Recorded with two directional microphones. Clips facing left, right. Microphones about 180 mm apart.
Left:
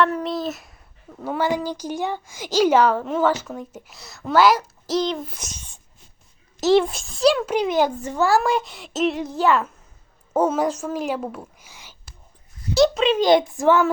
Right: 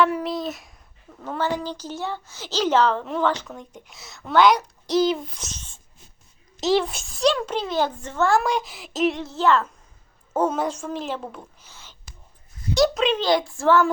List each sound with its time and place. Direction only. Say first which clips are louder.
0.0 s a woman's voice: left 1 dB; 5° right (ahead or behind)
5.4 s a woman's voice: even; 10° left (ahead or behind)
6.7 s speech: left 5 dB; centre (ahead or behind)
9.2 s a woman's voice: left 1 dB; 15° left (ahead or behind)
12.7 s speech: left 3 dB; centre (ahead or behind)
13.1 s a woman's voice: left 5 dB; 20° left (ahead or behind)